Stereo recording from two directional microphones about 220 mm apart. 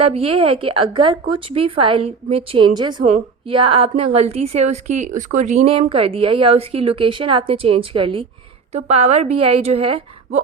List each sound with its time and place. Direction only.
0.0 s a woman's voice: 25° right (ahead or behind)